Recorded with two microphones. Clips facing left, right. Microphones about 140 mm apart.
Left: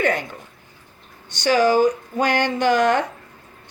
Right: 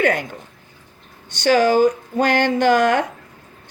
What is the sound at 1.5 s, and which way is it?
Speech, 55° right (ahead or behind).